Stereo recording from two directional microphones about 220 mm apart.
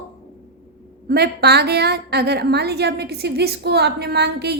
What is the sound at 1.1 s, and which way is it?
A woman's voice, 45° right (ahead or behind).